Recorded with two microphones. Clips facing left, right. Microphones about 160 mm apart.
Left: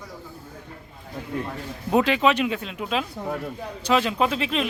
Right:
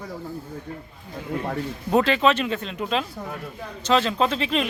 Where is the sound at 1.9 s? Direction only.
10° left (ahead or behind).